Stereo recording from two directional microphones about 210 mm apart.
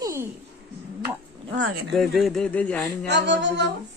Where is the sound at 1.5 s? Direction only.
55° right (ahead or behind).